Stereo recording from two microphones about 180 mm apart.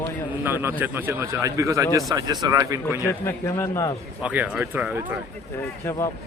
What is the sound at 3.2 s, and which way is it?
Speech, 15° left (ahead or behind).